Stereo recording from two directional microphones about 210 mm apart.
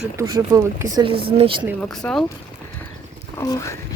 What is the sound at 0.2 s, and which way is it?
Speech, 15° right (ahead or behind).